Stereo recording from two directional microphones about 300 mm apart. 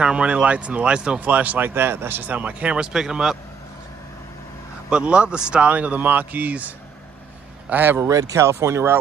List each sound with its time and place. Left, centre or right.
0.0 s speech: centre
4.9 s speech: centre